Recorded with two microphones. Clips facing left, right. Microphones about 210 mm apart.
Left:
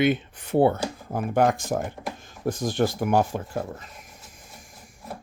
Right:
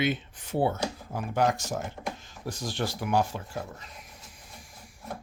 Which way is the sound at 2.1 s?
50° left (ahead or behind).